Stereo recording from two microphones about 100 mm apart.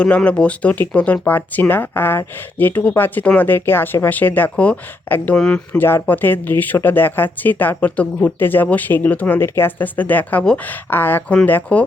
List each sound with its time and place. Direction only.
0.0 s speech: 10° left (ahead or behind)
5.4 s speech: 5° left (ahead or behind)
5.7 s speech: 20° left (ahead or behind)